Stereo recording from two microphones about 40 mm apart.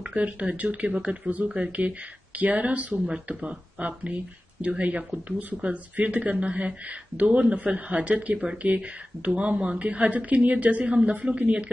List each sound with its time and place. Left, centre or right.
0.1 s a man's voice: right
1.7 s a man's voice: right